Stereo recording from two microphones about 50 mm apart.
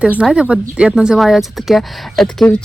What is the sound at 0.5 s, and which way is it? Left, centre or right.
Speech, centre.